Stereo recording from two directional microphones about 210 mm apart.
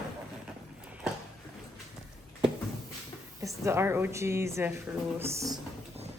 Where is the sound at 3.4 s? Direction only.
15° right (ahead or behind).